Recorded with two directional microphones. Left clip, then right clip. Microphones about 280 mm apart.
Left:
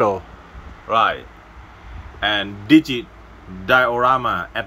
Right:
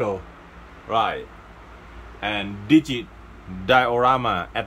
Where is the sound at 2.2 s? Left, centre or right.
Centre.